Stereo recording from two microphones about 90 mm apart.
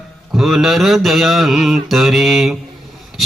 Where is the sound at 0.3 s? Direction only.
5° right (ahead or behind).